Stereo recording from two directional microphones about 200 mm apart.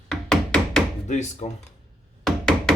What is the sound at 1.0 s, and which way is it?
Speech, 35° left (ahead or behind).